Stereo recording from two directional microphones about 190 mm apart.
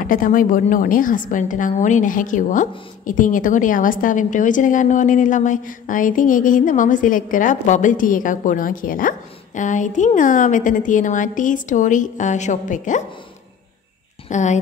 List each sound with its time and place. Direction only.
0.0 s a woman's voice: 45° left (ahead or behind)
14.3 s a woman's voice: 40° left (ahead or behind)